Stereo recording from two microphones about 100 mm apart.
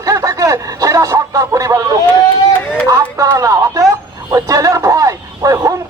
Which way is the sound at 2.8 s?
30° right (ahead or behind).